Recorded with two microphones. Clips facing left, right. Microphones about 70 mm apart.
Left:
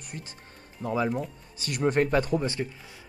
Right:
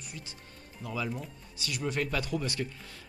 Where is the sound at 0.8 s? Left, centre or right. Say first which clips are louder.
Left 8 dB; left.